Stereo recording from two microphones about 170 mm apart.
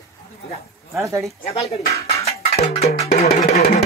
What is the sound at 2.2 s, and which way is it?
Music, 35° left (ahead or behind).